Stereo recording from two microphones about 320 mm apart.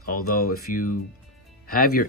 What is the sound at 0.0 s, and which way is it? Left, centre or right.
Speech, left.